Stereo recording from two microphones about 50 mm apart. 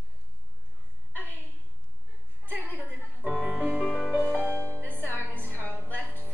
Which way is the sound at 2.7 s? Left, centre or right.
Right.